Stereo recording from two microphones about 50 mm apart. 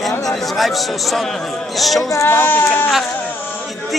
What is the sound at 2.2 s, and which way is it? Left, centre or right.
Speech, left.